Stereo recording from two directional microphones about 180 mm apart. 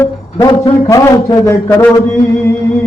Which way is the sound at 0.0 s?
15° left (ahead or behind).